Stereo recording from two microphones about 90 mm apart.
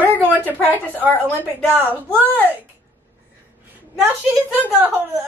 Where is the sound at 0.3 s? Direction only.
20° right (ahead or behind).